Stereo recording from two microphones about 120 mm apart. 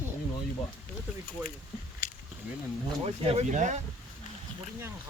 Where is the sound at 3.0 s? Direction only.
55° right (ahead or behind).